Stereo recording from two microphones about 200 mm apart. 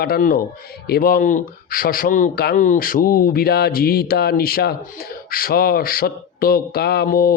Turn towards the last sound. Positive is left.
turn(degrees=50)  # may be behind; listen again after turning